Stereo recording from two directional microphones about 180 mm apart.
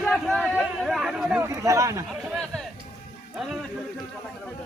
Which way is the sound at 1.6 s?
15° right (ahead or behind).